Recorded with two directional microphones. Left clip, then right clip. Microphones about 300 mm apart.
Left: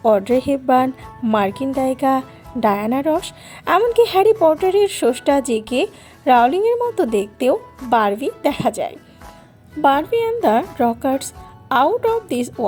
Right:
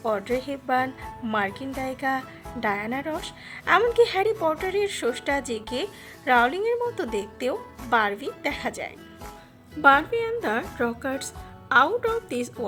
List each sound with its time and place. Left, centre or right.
0.0 s a woman's voice: centre